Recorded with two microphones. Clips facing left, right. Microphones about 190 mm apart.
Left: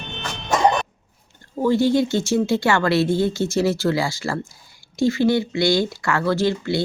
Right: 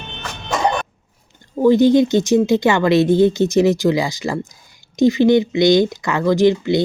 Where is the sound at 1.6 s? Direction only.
20° right (ahead or behind).